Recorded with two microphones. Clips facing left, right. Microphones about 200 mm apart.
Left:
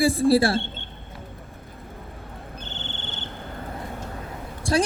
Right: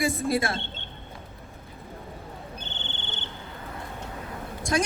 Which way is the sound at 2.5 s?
65° right (ahead or behind).